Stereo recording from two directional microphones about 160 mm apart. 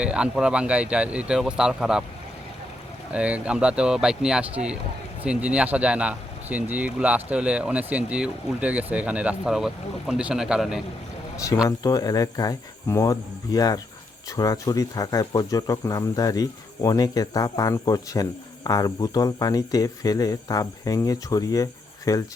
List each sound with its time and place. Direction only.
0.0 s speech: 5° right (ahead or behind)
3.1 s speech: 10° right (ahead or behind)
11.8 s speech: 25° left (ahead or behind)